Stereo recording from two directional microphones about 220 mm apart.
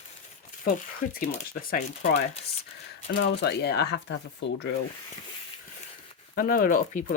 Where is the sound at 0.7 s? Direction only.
40° left (ahead or behind).